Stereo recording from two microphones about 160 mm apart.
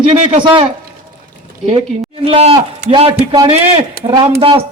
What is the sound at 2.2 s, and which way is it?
A man's voice, 40° right (ahead or behind).